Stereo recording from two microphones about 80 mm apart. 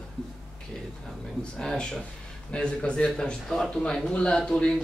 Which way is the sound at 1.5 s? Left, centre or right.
Centre.